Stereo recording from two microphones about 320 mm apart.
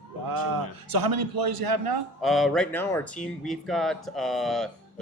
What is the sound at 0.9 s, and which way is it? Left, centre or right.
A man's voice, right.